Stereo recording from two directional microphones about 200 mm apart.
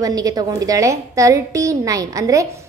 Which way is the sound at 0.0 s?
20° right (ahead or behind).